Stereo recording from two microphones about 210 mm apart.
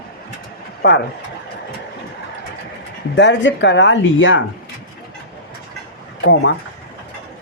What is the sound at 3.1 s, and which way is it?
Speech, 60° left (ahead or behind).